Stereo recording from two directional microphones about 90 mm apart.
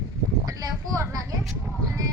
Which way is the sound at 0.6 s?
40° right (ahead or behind).